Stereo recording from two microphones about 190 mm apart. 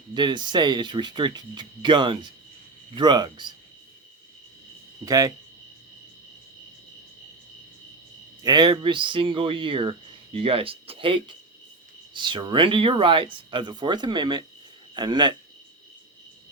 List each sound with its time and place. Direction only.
0.1 s speech: 25° right (ahead or behind)
5.0 s speech: 20° right (ahead or behind)
8.4 s speech: 25° right (ahead or behind)